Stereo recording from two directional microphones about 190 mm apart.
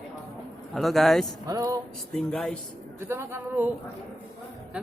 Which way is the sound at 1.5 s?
20° right (ahead or behind).